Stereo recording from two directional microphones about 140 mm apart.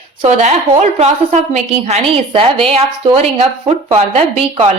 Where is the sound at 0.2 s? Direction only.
50° right (ahead or behind).